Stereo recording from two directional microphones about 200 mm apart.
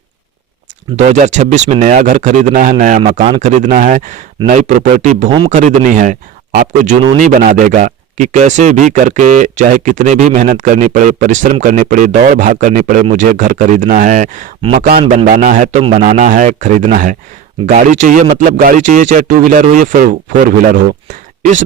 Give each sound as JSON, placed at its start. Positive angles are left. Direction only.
{"t": 0.9, "sound": "speech", "side_deg": -35}
{"t": 3.0, "sound": "speech", "side_deg": -30}